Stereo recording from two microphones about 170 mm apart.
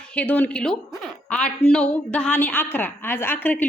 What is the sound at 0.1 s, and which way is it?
A woman's voice, 10° left (ahead or behind).